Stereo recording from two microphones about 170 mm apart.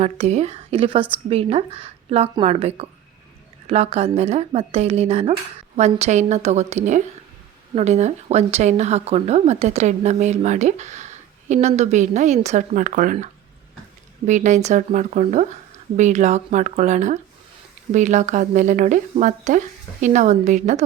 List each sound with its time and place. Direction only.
0.0 s speech: 40° right (ahead or behind)